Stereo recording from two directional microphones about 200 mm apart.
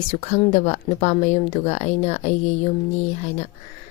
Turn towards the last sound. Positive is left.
turn(degrees=35)  # may be behind; listen again after turning